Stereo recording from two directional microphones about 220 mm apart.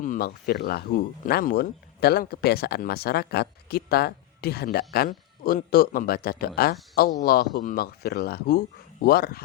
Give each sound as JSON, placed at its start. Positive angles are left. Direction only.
{"t": 0.0, "sound": "speech", "side_deg": 40}